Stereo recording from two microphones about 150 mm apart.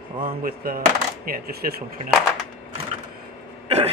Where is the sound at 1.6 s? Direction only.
70° right (ahead or behind).